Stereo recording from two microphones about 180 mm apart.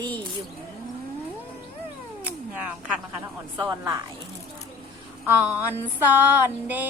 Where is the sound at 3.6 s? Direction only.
20° right (ahead or behind).